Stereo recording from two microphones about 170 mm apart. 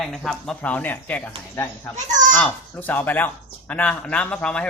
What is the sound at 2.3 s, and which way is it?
Speech, 10° left (ahead or behind).